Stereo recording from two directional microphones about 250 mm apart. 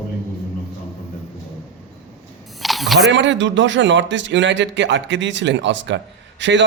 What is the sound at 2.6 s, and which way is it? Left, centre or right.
Camera, centre.